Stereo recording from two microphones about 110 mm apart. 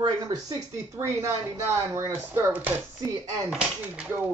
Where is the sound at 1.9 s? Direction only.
25° right (ahead or behind).